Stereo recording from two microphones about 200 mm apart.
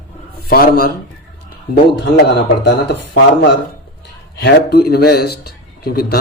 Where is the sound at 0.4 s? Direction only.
45° left (ahead or behind).